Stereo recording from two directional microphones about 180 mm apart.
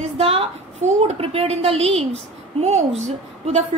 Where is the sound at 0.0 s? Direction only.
30° right (ahead or behind).